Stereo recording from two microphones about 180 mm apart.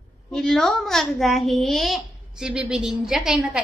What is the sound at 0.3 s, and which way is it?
A child's voice, centre (ahead or behind).